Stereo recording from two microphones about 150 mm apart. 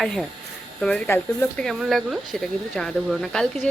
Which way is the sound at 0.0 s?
Centre (ahead or behind).